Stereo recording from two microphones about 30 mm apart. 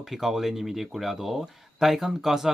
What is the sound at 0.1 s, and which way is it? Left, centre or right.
Speech, centre.